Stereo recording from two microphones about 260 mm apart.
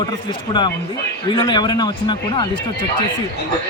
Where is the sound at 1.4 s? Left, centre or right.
Centre.